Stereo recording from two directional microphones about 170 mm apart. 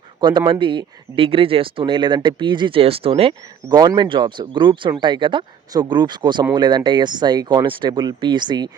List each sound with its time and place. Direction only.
0.2 s speech: 25° right (ahead or behind)